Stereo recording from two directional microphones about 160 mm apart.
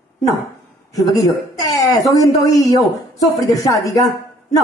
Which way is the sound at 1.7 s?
20° left (ahead or behind).